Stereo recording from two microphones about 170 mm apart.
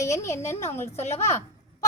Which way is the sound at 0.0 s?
15° left (ahead or behind).